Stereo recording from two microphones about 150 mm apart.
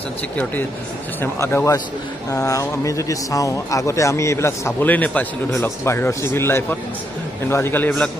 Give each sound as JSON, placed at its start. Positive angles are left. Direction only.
{"t": 1.2, "sound": "a man's voice", "side_deg": 15}